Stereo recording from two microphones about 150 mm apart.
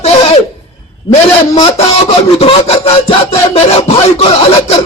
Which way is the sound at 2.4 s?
40° left (ahead or behind).